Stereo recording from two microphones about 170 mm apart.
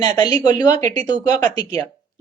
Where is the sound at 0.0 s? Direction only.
25° left (ahead or behind).